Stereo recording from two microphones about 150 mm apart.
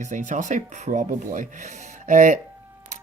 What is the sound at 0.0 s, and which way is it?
Speech, 55° right (ahead or behind).